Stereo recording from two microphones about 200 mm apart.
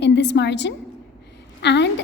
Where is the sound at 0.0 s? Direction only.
60° left (ahead or behind).